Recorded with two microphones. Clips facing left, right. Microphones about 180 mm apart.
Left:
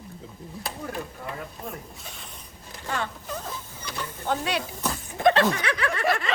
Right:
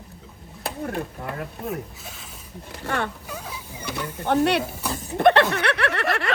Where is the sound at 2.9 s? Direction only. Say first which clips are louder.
Right 4 dB; 60° right (ahead or behind).